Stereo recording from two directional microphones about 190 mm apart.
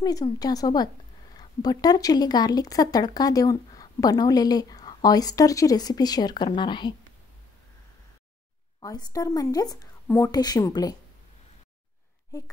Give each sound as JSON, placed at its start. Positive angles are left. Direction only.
{"t": 0.0, "sound": "speech", "side_deg": 20}
{"t": 8.8, "sound": "speech", "side_deg": 20}